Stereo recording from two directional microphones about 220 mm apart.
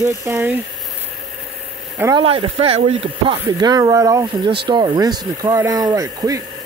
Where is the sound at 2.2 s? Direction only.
25° right (ahead or behind).